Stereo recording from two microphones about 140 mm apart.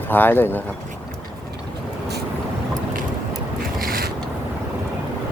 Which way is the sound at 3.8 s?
90° right.